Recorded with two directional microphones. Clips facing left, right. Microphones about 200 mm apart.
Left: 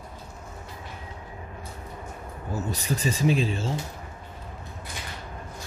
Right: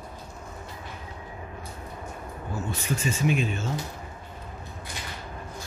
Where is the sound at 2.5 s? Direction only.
40° left (ahead or behind).